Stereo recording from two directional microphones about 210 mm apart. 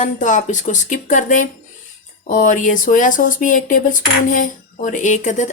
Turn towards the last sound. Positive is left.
turn(degrees=35)  # may be behind; listen again after turning